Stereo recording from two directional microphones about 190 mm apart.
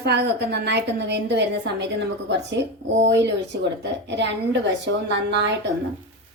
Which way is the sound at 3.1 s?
65° right (ahead or behind).